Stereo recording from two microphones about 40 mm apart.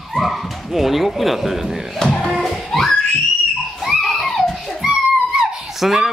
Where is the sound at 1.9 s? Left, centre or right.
Centre.